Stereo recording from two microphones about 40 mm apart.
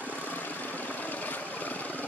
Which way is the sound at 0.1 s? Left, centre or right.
Left.